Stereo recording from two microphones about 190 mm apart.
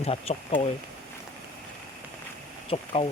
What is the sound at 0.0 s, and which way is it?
Speech, 30° left (ahead or behind).